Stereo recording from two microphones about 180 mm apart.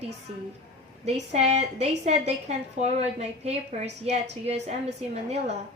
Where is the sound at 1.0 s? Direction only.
40° right (ahead or behind).